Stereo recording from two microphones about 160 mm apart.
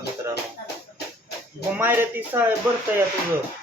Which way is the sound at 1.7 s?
10° right (ahead or behind).